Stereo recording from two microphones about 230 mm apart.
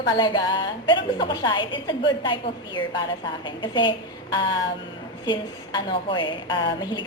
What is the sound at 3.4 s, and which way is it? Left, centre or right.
Speech, centre.